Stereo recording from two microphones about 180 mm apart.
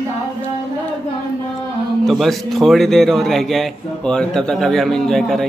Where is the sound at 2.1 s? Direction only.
Centre (ahead or behind).